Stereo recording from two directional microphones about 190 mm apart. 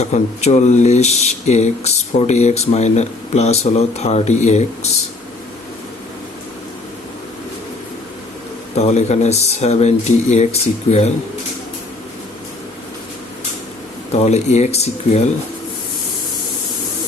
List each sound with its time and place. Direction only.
0.0 s speech: 35° left (ahead or behind)
8.7 s speech: 35° left (ahead or behind)
14.1 s speech: 35° left (ahead or behind)